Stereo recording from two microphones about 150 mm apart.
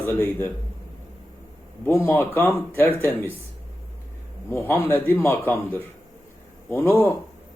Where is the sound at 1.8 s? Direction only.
15° left (ahead or behind).